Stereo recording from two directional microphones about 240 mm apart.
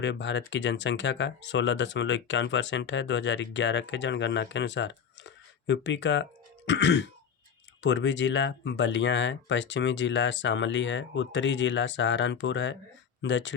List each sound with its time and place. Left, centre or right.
0.0 s speech: left